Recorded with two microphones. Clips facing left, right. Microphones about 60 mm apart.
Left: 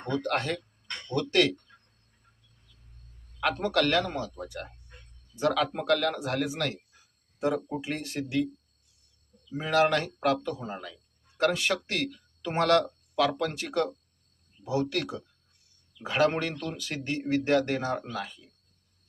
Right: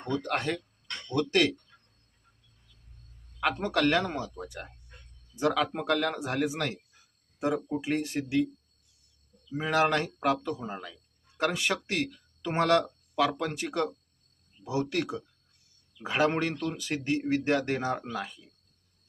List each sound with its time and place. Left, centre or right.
0.2 s a man's voice: centre
3.8 s a man's voice: centre
9.5 s a man's voice: centre